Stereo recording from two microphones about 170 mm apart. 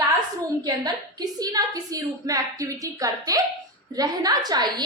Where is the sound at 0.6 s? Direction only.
25° right (ahead or behind).